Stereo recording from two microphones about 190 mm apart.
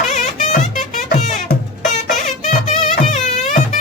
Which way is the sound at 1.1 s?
40° left (ahead or behind).